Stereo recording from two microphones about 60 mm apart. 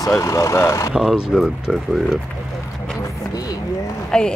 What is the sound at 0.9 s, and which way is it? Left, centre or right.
Speech, centre.